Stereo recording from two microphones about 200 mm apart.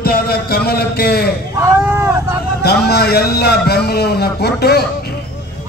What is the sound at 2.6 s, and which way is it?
A man's voice, 55° left (ahead or behind).